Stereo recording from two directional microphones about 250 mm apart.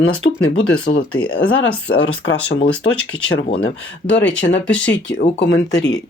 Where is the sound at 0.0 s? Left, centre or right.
Left.